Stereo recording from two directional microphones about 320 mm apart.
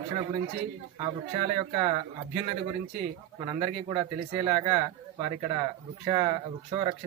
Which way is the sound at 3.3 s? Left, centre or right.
Centre.